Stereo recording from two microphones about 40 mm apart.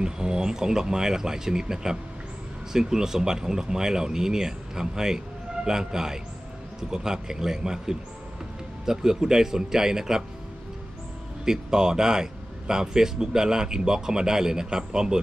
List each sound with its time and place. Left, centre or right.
0.0 s speech: centre
11.4 s speech: centre